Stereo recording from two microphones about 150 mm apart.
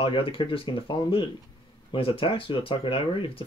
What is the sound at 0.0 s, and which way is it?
Speech, 35° left (ahead or behind).